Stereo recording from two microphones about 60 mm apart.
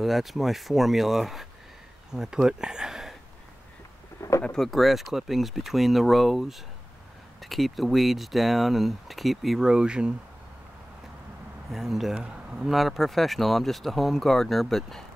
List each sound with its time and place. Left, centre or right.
0.0 s speech: centre
4.2 s bird: left
4.6 s speech: centre
9.7 s speech: centre
11.7 s speech: centre